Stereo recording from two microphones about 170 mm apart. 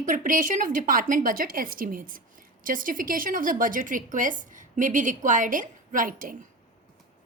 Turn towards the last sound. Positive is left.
turn(degrees=-55)  # may be behind; listen again after turning